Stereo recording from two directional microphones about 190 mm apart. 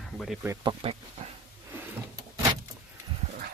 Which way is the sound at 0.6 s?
30° right (ahead or behind).